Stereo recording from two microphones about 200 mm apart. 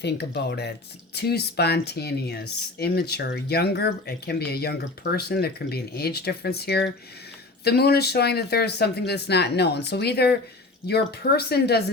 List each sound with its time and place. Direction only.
0.0 s speech: 55° left (ahead or behind)